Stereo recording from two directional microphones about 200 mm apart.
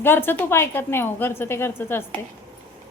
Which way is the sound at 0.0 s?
10° left (ahead or behind).